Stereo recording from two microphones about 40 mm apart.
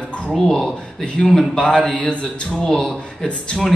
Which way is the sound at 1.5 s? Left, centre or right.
Left.